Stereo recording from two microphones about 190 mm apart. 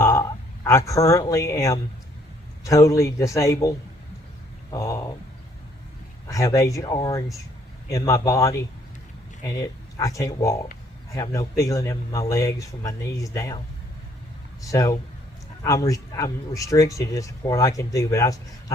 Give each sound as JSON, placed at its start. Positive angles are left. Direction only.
{"t": 0.0, "sound": "speech", "side_deg": 15}
{"t": 6.2, "sound": "speech", "side_deg": 15}
{"t": 14.7, "sound": "speech", "side_deg": 15}